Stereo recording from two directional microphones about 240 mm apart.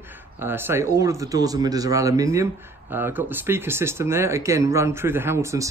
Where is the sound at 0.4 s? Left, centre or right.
Centre.